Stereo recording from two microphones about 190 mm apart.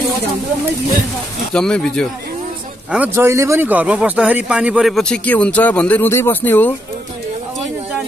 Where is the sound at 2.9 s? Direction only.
10° right (ahead or behind); by 6.7 s 10° left (ahead or behind).